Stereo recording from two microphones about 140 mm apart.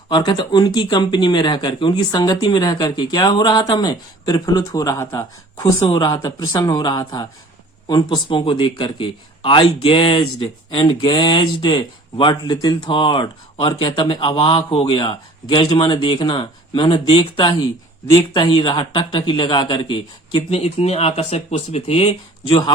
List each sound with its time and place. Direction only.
0.1 s a man's voice: 35° left (ahead or behind)